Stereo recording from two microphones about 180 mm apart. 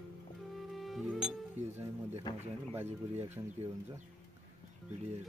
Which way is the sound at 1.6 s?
40° right (ahead or behind).